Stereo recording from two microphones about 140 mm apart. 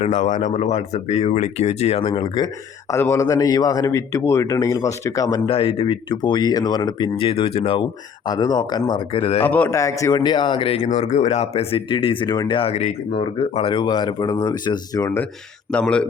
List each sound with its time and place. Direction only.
0.0 s speech: 55° left (ahead or behind)
0.5 s speech: 45° left (ahead or behind)
2.0 s speech: 35° left (ahead or behind)
2.9 s a man's voice: 20° left (ahead or behind)
5.5 s speech: 40° left (ahead or behind)
9.4 s a man's voice: 10° left (ahead or behind)
9.7 s speech: 25° left (ahead or behind); by 10.8 s 40° left (ahead or behind)
11.0 s a man's voice: 55° left (ahead or behind); by 15.2 s 25° left (ahead or behind)
15.7 s a man's voice: 10° left (ahead or behind)